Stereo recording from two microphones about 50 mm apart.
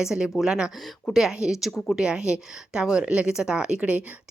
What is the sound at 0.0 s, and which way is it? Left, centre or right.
Speech, centre.